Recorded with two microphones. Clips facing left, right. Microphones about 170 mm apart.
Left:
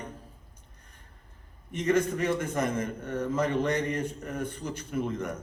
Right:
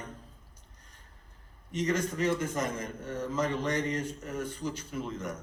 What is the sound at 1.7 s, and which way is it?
A man's voice, 55° left (ahead or behind).